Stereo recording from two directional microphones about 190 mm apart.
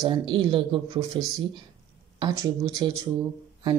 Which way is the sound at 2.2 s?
20° right (ahead or behind).